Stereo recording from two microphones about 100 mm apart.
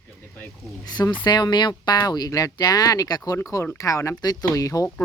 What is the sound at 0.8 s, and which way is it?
Speech, 45° left (ahead or behind).